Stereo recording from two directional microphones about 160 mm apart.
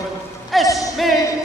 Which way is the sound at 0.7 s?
20° left (ahead or behind).